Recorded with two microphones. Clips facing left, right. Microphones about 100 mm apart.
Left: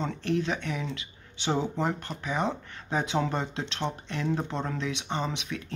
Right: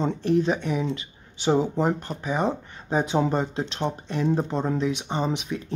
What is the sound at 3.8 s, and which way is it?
Speech, 10° right (ahead or behind).